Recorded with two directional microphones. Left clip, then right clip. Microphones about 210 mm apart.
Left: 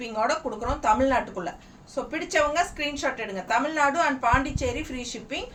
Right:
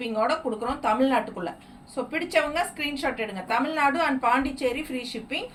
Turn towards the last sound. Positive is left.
turn(degrees=15)  # may be behind; listen again after turning